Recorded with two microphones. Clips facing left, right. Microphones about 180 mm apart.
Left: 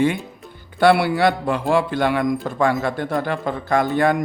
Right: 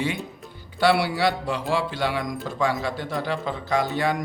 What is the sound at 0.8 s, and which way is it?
Speech, 55° left (ahead or behind).